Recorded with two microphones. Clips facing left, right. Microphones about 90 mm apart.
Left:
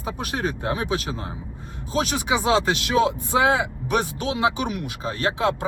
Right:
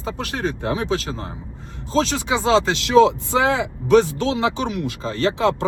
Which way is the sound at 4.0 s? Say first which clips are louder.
Right 2 dB; 15° left (ahead or behind).